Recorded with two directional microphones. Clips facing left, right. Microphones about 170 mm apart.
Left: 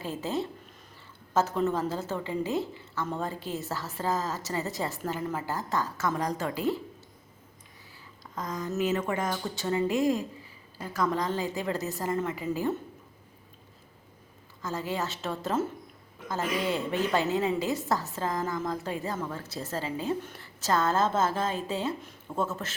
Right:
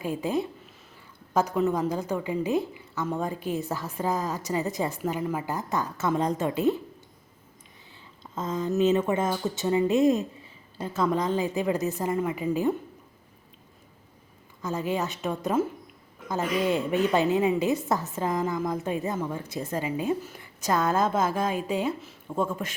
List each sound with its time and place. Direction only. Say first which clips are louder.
0.0 s a woman's voice: right 4 dB; 15° right (ahead or behind)
8.4 s a woman's voice: right 5 dB; 25° right (ahead or behind)
14.6 s a woman's voice: right 4 dB; 20° right (ahead or behind)